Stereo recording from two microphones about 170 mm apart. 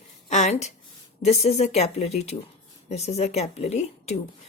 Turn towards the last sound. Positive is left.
turn(degrees=40)  # may be behind; listen again after turning